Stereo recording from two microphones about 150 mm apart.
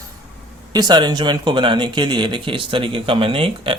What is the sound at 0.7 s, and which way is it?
Speech, 30° right (ahead or behind).